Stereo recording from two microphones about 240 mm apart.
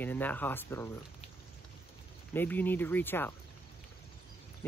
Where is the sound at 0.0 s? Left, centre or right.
Centre.